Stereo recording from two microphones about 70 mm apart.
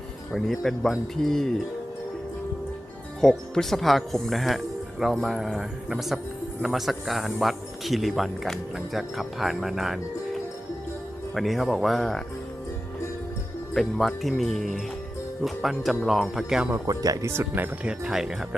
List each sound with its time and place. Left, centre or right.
0.3 s a man's voice: centre
3.2 s a man's voice: centre
11.3 s a man's voice: centre
13.8 s a man's voice: centre
16.8 s speech: right
17.2 s speech: right
17.8 s speech: centre